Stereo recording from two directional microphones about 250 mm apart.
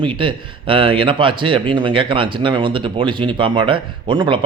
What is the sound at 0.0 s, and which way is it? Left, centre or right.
Speech, centre.